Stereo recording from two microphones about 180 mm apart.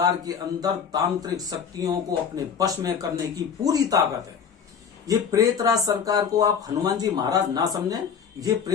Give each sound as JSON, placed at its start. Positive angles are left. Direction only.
{"t": 0.0, "sound": "speech", "side_deg": -20}
{"t": 5.0, "sound": "speech", "side_deg": -20}